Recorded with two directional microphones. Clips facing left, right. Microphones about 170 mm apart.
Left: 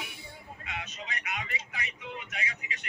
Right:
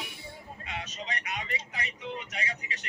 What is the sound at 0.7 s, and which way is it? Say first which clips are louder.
Speech: right 2 dB; 35° right (ahead or behind).